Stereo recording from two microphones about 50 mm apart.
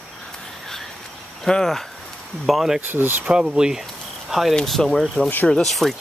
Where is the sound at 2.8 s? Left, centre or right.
Right.